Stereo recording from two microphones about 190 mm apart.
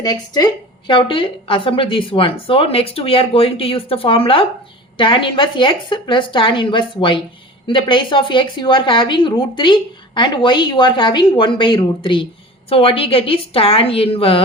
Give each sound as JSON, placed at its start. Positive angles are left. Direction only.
{"t": 0.0, "sound": "a woman's voice", "side_deg": 20}